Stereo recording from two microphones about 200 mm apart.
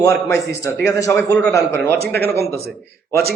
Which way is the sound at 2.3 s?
55° right (ahead or behind).